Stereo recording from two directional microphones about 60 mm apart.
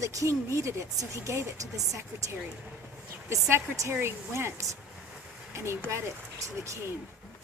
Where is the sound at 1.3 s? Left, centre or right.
Right.